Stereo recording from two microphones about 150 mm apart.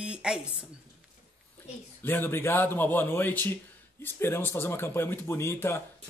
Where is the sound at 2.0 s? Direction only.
15° left (ahead or behind).